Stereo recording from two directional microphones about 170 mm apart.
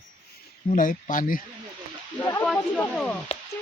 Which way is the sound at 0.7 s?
50° left (ahead or behind).